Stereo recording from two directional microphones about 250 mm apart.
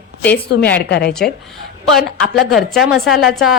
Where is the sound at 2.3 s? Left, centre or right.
Centre.